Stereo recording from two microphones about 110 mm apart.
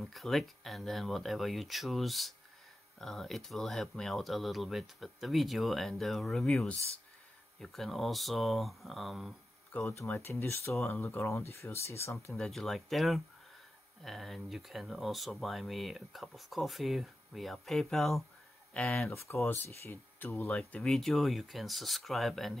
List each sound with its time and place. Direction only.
0.0 s speech: centre (ahead or behind)
9.7 s speech: 15° left (ahead or behind)
12.4 s speech: centre (ahead or behind)
19.0 s speech: 25° left (ahead or behind)
20.5 s speech: 5° left (ahead or behind)